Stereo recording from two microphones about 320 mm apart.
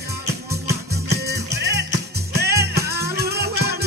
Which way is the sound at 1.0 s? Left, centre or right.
Right.